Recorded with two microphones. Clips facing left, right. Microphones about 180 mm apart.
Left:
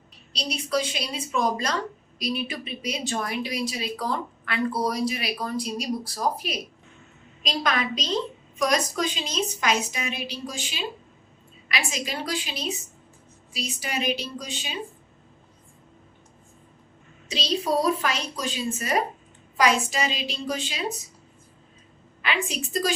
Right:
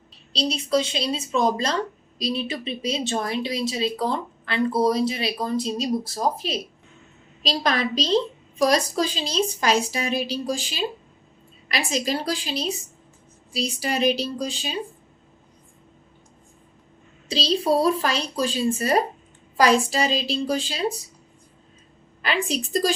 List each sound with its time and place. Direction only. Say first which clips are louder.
0.3 s a woman's voice: right 4 dB; 25° right (ahead or behind)
17.2 s a woman's voice: right 4 dB; 35° right (ahead or behind)
22.2 s a woman's voice: right 3 dB; 35° right (ahead or behind)